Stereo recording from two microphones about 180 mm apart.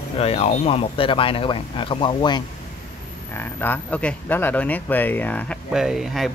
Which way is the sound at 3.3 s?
10° left (ahead or behind).